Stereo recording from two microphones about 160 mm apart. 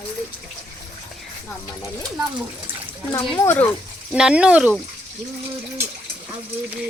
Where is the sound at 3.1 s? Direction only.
20° left (ahead or behind).